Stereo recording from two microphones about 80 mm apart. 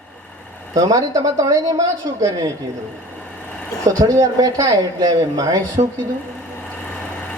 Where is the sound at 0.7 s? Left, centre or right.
Right.